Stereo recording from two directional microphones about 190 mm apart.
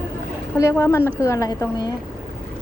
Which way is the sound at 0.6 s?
15° left (ahead or behind).